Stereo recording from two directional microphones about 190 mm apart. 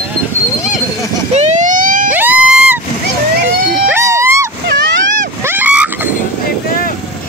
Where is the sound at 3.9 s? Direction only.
15° right (ahead or behind).